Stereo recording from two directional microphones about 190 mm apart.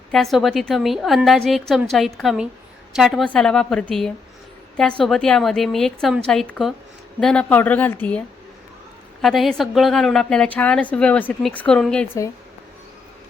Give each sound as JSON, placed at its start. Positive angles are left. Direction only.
{"t": 0.1, "sound": "a woman's voice", "side_deg": 0}
{"t": 9.2, "sound": "a woman's voice", "side_deg": 0}